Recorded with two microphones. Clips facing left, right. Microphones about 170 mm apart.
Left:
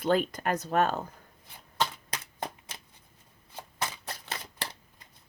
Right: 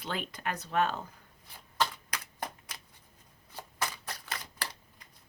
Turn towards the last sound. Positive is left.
turn(degrees=25)  # may be behind; listen again after turning